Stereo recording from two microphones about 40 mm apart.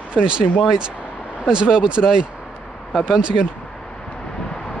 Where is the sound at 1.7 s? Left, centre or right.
Right.